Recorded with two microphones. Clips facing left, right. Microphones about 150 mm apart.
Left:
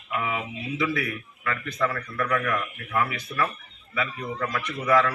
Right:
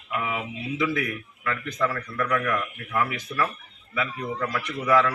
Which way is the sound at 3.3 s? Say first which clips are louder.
Even; 15° left (ahead or behind).